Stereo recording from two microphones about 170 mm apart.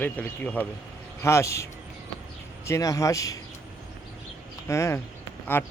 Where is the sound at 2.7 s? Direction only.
20° left (ahead or behind).